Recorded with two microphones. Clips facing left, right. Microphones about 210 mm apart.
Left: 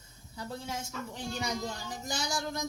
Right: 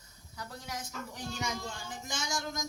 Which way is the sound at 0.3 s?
25° left (ahead or behind).